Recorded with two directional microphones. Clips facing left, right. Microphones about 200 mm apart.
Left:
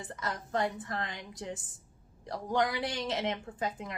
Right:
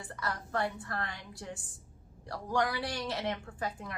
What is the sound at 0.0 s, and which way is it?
A woman's voice, 20° left (ahead or behind).